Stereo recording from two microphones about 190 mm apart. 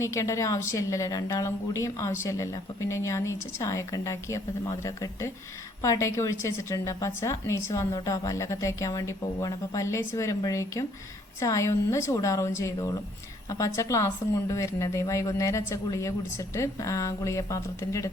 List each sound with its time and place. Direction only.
0.0 s a woman's voice: 15° left (ahead or behind)